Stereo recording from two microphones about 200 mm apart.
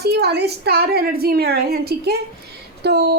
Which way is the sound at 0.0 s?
55° right (ahead or behind).